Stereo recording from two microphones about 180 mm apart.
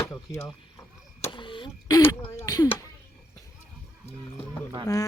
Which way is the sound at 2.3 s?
20° left (ahead or behind).